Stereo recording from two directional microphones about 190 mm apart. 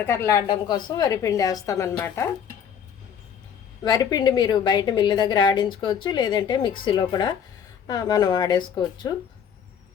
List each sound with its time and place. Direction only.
0.0 s a woman's voice: 15° left (ahead or behind)
3.8 s a woman's voice: 20° left (ahead or behind)